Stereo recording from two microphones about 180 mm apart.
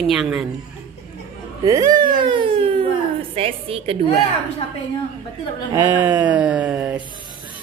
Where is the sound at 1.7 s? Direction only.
20° right (ahead or behind).